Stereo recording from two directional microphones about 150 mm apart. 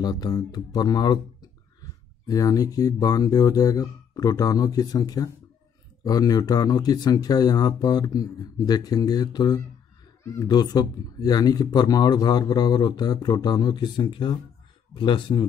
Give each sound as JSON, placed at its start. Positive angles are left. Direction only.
{"t": 0.0, "sound": "speech", "side_deg": 25}